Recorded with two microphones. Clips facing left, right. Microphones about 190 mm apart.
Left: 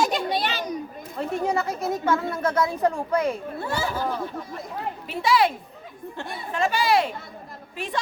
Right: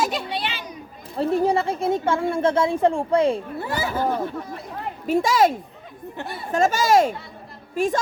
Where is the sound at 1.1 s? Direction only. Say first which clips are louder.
Right 5 dB; 30° right (ahead or behind).